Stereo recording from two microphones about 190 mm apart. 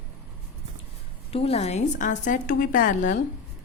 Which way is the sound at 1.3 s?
30° left (ahead or behind).